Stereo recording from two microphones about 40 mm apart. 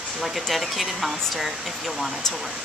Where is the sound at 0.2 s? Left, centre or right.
Centre.